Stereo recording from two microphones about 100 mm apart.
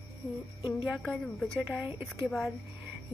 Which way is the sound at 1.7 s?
20° right (ahead or behind).